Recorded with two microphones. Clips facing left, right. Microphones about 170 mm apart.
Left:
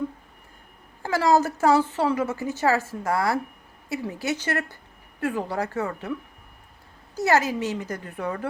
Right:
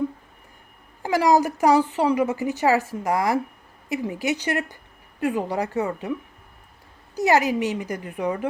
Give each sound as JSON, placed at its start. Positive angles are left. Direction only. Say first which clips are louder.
{"t": 1.0, "sound": "a woman's voice", "louder": "right 2 dB", "side_deg": -15}
{"t": 7.2, "sound": "a woman's voice", "louder": "right 2 dB", "side_deg": -15}